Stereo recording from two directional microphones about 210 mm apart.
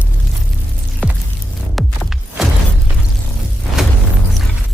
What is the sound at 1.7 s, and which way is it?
Music, centre (ahead or behind).